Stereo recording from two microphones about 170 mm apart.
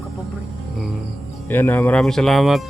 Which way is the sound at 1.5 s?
10° left (ahead or behind).